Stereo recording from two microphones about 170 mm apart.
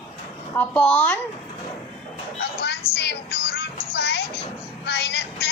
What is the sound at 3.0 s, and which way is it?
Music, 75° left (ahead or behind).